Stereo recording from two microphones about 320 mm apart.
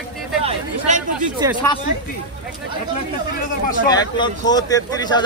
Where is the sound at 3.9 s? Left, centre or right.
Centre.